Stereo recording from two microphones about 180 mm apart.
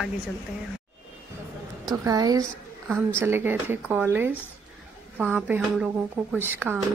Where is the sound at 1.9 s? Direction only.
20° right (ahead or behind).